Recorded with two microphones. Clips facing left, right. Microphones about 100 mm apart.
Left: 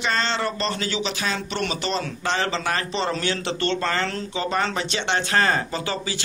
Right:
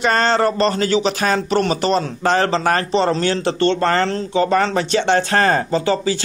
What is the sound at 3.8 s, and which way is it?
Speech, 50° right (ahead or behind).